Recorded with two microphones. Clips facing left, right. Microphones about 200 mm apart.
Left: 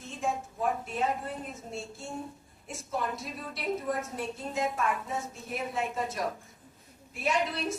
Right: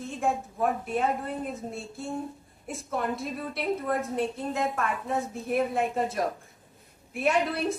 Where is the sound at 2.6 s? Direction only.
55° right (ahead or behind).